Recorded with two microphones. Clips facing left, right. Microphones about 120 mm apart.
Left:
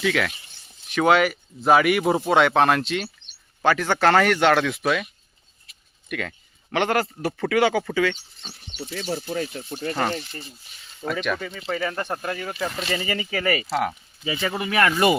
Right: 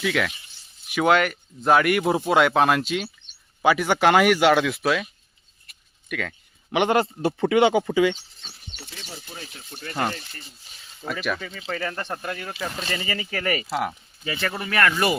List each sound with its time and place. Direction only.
0.0 s speech: centre (ahead or behind)
5.7 s a sound: 55° right (ahead or behind)
6.1 s speech: centre (ahead or behind)
6.7 s speech: 15° right (ahead or behind)
8.9 s speech: 80° left; by 9.6 s 65° left (ahead or behind)
9.6 s speech: 40° left (ahead or behind)
11.0 s speech: centre (ahead or behind); by 15.1 s 15° left (ahead or behind)